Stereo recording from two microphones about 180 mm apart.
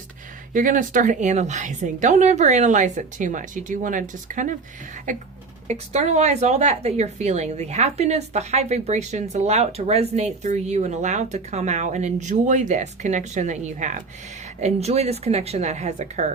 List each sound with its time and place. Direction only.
0.5 s a woman's voice: 45° right (ahead or behind)